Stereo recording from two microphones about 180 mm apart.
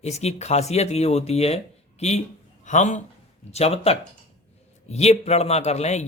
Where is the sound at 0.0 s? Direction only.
35° left (ahead or behind).